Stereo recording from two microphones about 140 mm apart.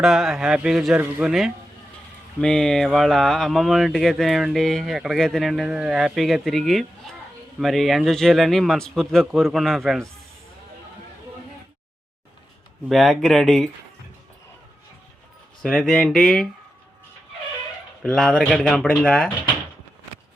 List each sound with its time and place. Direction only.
0.0 s speech: 5° right (ahead or behind)
12.9 s speech: centre (ahead or behind)
15.6 s speech: 5° left (ahead or behind)
18.0 s speech: 5° left (ahead or behind)